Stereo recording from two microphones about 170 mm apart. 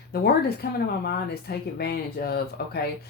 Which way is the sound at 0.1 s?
70° left (ahead or behind).